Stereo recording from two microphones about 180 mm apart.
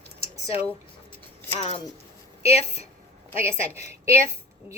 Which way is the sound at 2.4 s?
35° left (ahead or behind).